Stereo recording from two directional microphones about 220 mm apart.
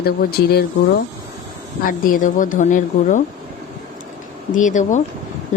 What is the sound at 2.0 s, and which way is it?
Speech, 40° left (ahead or behind).